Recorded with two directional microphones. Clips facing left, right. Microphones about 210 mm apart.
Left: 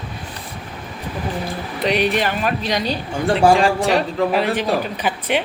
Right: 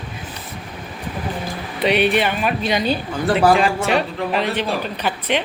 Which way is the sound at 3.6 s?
35° left (ahead or behind).